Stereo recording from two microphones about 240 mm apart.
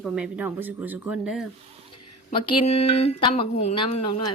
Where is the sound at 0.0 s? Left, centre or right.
Centre.